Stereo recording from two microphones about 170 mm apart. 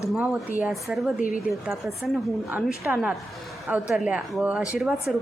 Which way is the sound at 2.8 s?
10° right (ahead or behind).